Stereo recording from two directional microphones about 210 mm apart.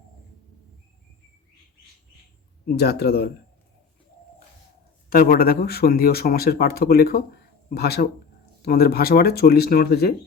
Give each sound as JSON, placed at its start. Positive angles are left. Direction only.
{"t": 2.6, "sound": "speech", "side_deg": 50}
{"t": 5.0, "sound": "speech", "side_deg": 45}